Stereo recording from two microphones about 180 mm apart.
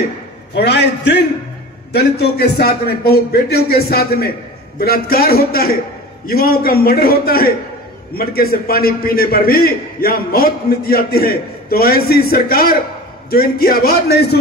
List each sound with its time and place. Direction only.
0.6 s a man's voice: 70° left (ahead or behind)